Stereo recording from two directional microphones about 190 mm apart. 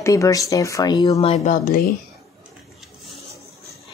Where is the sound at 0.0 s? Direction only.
15° left (ahead or behind).